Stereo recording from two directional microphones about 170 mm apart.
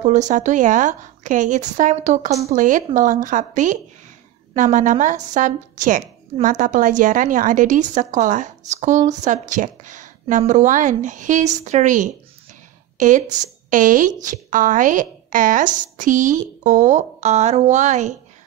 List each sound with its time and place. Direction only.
0.0 s a woman's voice: 45° right (ahead or behind)